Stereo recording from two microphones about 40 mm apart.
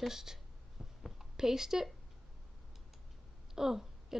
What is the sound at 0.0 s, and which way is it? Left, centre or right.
Speech, centre.